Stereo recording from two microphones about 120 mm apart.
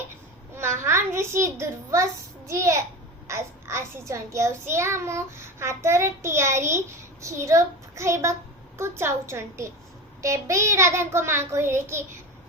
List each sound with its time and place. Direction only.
0.5 s a child's voice: 20° right (ahead or behind)
2.5 s child singing: 25° right (ahead or behind)